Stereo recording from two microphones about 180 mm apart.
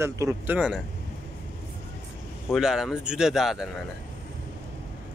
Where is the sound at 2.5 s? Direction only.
5° right (ahead or behind).